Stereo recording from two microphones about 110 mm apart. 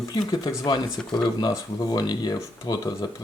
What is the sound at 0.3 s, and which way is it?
Speech, 40° left (ahead or behind).